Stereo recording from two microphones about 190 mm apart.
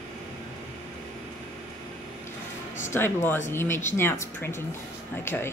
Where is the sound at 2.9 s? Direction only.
10° left (ahead or behind).